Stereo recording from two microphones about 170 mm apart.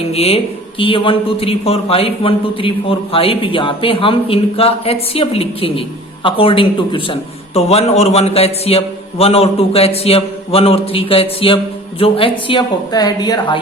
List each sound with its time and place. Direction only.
0.1 s a man's voice: 35° left (ahead or behind)